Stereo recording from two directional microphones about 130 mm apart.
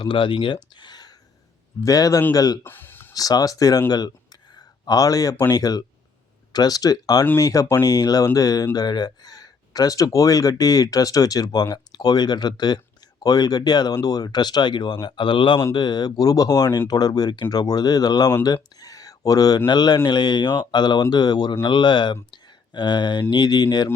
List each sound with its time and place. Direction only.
0.0 s speech: 40° left (ahead or behind)
2.6 s a sound: 15° left (ahead or behind)
3.2 s speech: 30° left (ahead or behind)